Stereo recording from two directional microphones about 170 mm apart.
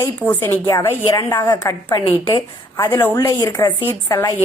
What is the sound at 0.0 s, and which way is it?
A woman's voice, 15° left (ahead or behind).